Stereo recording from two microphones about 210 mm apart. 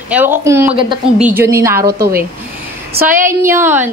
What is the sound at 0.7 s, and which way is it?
Speech, 25° right (ahead or behind).